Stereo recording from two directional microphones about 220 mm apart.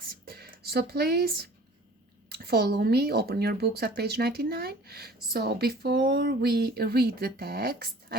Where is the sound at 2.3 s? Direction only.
45° right (ahead or behind).